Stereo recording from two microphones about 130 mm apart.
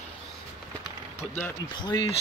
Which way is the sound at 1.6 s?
35° left (ahead or behind).